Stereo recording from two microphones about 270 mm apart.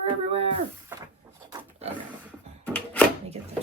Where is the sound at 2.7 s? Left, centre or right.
Centre.